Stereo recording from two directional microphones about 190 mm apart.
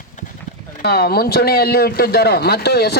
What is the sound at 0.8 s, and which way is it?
Speech, 55° left (ahead or behind).